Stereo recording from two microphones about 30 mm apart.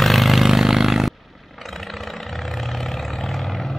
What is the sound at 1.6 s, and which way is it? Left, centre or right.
Vehicle, centre.